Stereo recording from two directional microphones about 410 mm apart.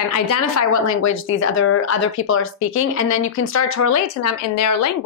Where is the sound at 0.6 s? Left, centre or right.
Left.